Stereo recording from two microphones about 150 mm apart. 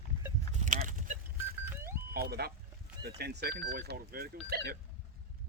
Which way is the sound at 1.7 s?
15° right (ahead or behind).